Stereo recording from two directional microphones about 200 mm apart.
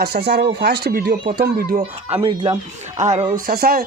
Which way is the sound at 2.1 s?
25° right (ahead or behind).